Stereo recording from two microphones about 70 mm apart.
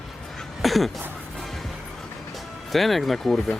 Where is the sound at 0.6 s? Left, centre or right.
Centre.